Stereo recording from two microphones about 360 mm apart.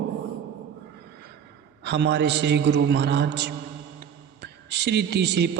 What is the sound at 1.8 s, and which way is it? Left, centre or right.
A man's voice, right.